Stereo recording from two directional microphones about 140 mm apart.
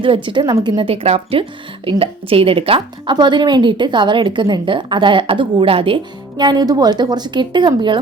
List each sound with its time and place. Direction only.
0.0 s speech: 35° right (ahead or behind)